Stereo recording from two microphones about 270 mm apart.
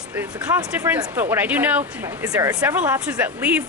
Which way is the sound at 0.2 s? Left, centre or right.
Centre.